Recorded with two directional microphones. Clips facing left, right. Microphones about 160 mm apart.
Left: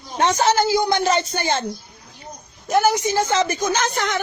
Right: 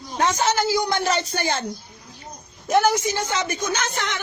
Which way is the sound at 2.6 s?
Centre (ahead or behind).